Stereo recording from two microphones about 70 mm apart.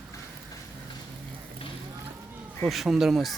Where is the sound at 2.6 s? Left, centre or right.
Centre.